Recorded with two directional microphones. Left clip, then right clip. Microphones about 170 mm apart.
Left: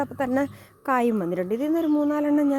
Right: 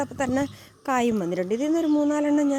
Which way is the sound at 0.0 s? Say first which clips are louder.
Left 1 dB; 5° left (ahead or behind).